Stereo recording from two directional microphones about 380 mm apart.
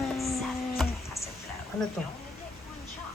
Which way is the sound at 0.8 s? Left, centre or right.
Centre.